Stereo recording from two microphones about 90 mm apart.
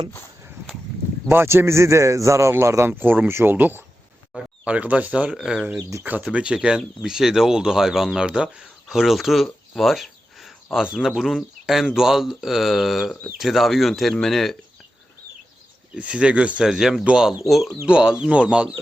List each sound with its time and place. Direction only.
1.3 s speech: 25° right (ahead or behind); by 5.6 s 5° right (ahead or behind)
6.0 s speech: 20° right (ahead or behind); by 14.5 s 5° left (ahead or behind)
16.0 s speech: 15° right (ahead or behind)